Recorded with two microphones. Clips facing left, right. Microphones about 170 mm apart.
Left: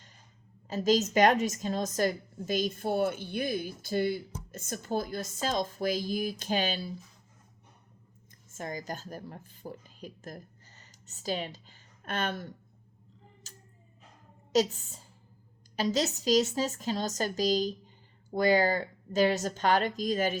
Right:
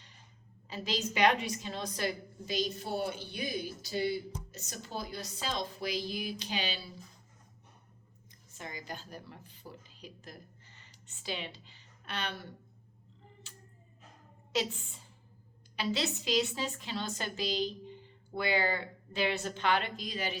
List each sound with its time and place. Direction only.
0.7 s a woman's voice: 45° left (ahead or behind)
8.4 s a woman's voice: 45° left (ahead or behind)
13.5 s a sound: 40° left (ahead or behind)
14.5 s a woman's voice: 40° left (ahead or behind)